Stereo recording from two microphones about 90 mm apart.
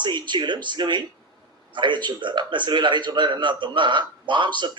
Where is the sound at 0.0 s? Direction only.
55° right (ahead or behind).